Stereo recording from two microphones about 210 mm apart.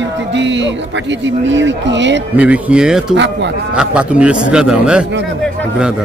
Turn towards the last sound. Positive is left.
turn(degrees=-5)  # may be behind; listen again after turning